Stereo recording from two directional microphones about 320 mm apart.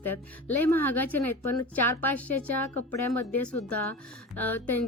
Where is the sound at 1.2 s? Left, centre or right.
Left.